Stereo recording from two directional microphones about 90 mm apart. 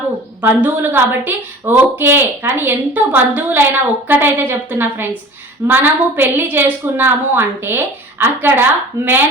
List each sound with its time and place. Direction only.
0.4 s a woman's voice: 25° right (ahead or behind)